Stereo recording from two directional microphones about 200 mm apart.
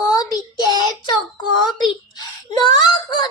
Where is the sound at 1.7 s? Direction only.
20° left (ahead or behind).